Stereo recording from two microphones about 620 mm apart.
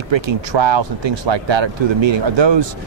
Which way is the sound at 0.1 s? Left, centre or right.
Right.